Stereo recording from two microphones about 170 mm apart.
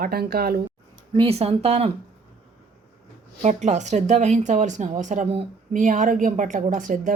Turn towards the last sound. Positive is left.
turn(degrees=-50)  # may be behind; listen again after turning